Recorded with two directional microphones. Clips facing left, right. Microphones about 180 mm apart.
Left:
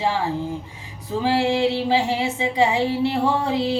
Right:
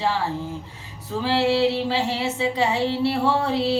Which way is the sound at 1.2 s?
15° left (ahead or behind).